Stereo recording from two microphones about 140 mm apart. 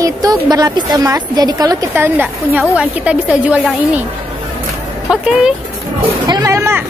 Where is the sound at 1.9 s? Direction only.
15° right (ahead or behind).